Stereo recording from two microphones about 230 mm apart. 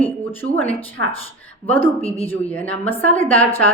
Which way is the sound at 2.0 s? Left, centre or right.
Left.